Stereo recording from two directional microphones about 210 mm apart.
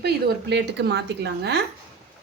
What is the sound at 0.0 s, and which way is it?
Speech, 50° right (ahead or behind).